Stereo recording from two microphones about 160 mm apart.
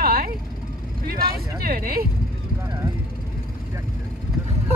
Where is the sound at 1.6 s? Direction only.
65° right (ahead or behind).